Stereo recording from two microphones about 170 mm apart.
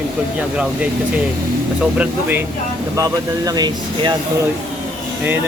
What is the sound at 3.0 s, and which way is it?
Speech, 20° right (ahead or behind).